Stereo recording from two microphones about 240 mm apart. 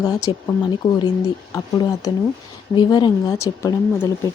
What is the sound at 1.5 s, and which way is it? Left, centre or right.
Speech, centre.